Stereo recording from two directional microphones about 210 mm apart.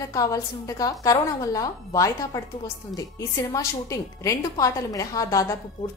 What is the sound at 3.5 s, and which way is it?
A woman's voice, 15° left (ahead or behind).